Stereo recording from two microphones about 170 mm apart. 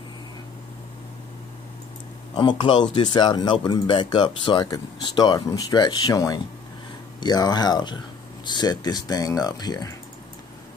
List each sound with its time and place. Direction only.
2.3 s speech: 25° left (ahead or behind)